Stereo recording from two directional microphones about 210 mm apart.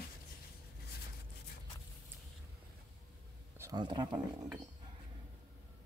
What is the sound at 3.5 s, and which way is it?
Speech, 15° right (ahead or behind).